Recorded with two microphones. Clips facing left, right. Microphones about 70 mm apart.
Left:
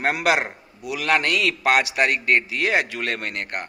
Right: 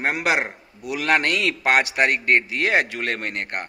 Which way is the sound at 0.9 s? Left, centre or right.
Right.